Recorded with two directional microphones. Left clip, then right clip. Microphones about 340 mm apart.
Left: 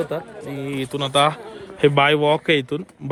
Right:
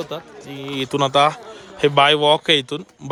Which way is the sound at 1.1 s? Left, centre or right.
Centre.